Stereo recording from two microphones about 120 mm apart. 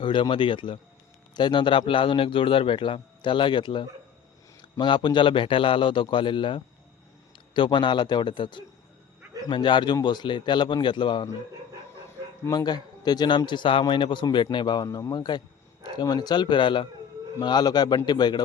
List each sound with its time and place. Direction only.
0.0 s a man's voice: 40° left (ahead or behind)
12.5 s a man's voice: 35° left (ahead or behind)